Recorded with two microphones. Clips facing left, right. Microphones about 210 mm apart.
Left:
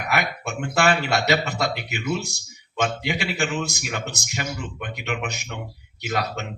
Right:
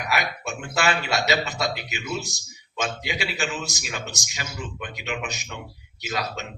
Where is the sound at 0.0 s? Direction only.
55° left (ahead or behind).